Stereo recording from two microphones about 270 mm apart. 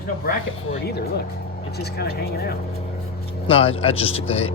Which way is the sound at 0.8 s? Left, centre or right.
Left.